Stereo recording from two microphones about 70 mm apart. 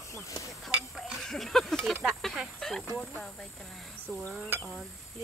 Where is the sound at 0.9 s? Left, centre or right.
Centre.